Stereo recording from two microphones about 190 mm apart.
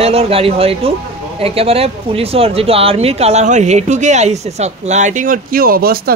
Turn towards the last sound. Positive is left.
turn(degrees=-50)  # may be behind; listen again after turning